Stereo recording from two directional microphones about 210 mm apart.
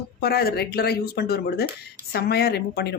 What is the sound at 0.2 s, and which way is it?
Speech, 50° left (ahead or behind).